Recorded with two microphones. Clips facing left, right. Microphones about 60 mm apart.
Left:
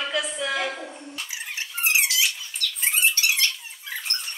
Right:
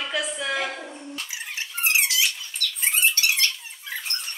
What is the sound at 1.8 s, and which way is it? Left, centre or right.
Squeak, centre.